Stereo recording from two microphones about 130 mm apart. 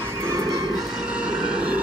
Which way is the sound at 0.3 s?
25° right (ahead or behind).